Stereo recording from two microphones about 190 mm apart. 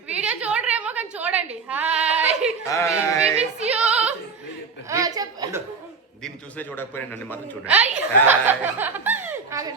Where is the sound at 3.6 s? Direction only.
5° right (ahead or behind).